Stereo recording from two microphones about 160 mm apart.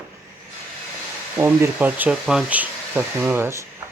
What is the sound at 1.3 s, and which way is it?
Speech, 15° right (ahead or behind).